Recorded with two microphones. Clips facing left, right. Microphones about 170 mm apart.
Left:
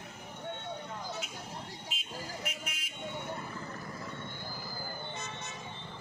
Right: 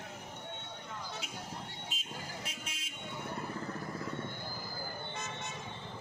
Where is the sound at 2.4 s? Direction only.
30° right (ahead or behind).